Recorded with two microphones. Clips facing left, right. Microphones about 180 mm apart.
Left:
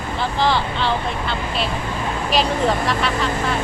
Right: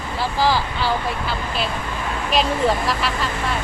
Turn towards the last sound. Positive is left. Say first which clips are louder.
# left 1 dB
turn(degrees=0)  # may be behind; listen again after turning